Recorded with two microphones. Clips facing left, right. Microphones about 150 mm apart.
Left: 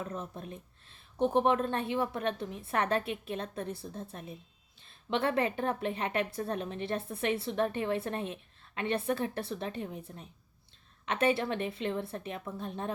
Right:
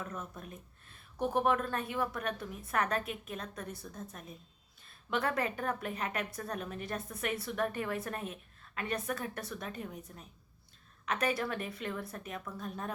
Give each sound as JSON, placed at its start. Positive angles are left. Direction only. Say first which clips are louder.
{"t": 0.0, "sound": "a woman's voice", "louder": "left 4 dB", "side_deg": 30}